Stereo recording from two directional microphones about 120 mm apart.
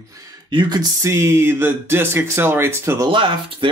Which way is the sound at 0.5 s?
40° right (ahead or behind).